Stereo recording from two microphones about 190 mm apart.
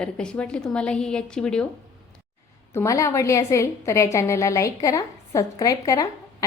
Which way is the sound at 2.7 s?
15° left (ahead or behind).